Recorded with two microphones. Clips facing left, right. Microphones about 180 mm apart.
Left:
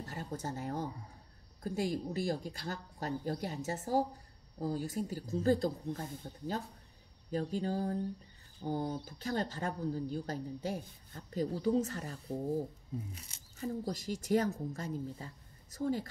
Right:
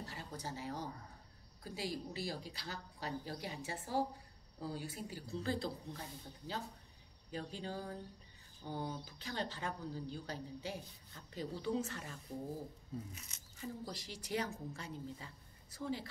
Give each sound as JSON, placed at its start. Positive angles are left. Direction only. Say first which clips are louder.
{"t": 0.0, "sound": "speech", "louder": "left 6 dB", "side_deg": 50}
{"t": 13.6, "sound": "speech", "louder": "left 8 dB", "side_deg": 45}